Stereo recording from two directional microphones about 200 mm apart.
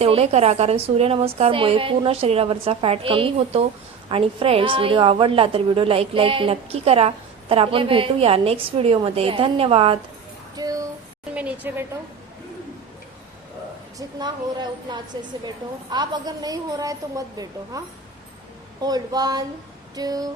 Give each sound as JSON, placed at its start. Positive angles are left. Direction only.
{"t": 0.0, "sound": "a woman's voice", "side_deg": -30}
{"t": 10.5, "sound": "a sound", "side_deg": -20}
{"t": 11.3, "sound": "speech", "side_deg": -5}
{"t": 14.2, "sound": "a woman's voice", "side_deg": -20}